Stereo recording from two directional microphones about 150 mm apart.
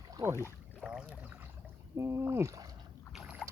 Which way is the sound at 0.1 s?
20° right (ahead or behind).